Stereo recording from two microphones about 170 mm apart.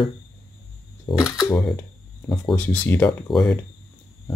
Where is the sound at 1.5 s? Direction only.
10° left (ahead or behind).